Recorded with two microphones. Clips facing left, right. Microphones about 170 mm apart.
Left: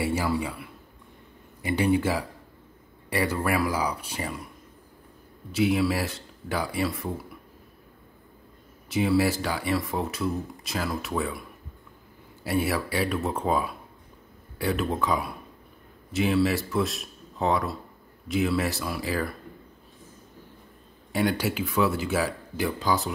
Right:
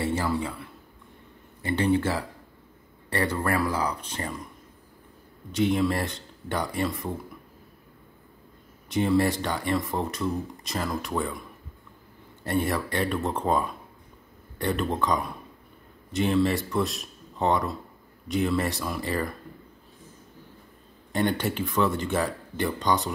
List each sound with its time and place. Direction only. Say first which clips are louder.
0.0 s speech: even; 10° left (ahead or behind)
5.5 s speech: even; 5° left (ahead or behind)
8.8 s speech: even; 5° left (ahead or behind)
12.4 s speech: even; 5° left (ahead or behind)
21.1 s speech: even; 5° left (ahead or behind)